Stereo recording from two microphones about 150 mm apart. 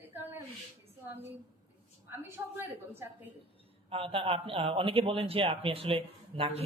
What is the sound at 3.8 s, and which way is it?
A man's voice, 35° right (ahead or behind).